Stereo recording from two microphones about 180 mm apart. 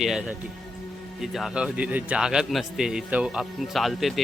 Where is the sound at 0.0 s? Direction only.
5° right (ahead or behind).